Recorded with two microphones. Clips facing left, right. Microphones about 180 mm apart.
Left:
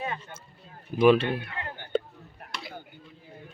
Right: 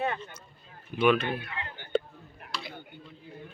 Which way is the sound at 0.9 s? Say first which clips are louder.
Left 5 dB; 30° left (ahead or behind).